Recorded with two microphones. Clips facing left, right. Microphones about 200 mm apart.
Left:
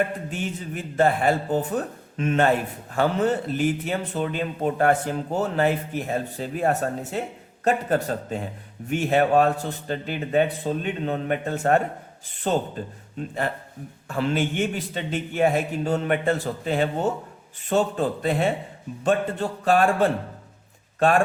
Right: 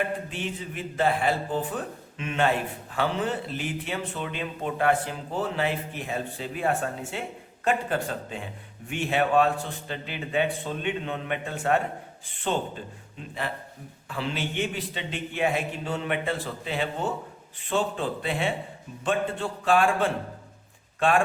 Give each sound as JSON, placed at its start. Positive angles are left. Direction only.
{"t": 0.3, "sound": "a man's voice", "side_deg": 45}